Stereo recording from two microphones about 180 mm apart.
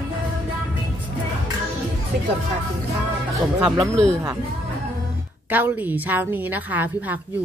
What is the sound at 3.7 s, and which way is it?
Speech, 15° right (ahead or behind).